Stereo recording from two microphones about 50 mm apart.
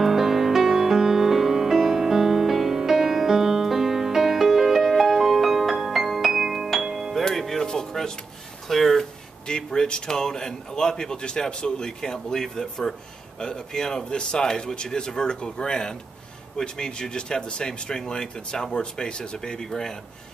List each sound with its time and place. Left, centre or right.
0.0 s music: centre
7.2 s music: centre
8.6 s a sound: centre
9.5 s a man's voice: centre